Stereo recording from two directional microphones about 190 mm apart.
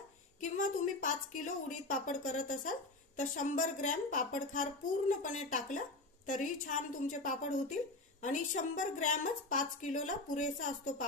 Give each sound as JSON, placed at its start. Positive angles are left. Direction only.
{"t": 0.4, "sound": "a woman's voice", "side_deg": 40}